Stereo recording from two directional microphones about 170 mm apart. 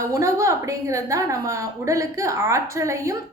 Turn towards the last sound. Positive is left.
turn(degrees=-15)  # may be behind; listen again after turning